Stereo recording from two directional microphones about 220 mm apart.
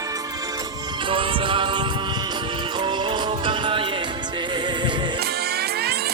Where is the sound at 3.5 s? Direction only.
20° right (ahead or behind).